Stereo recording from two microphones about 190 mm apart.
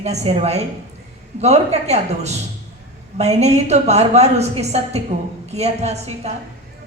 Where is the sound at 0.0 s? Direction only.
35° right (ahead or behind).